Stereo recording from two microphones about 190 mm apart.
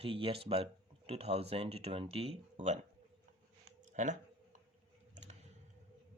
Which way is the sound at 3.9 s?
40° right (ahead or behind).